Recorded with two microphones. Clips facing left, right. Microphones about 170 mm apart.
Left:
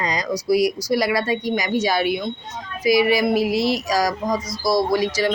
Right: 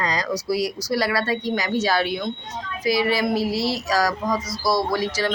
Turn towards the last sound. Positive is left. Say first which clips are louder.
# left 4 dB
turn(degrees=15)  # may be behind; listen again after turning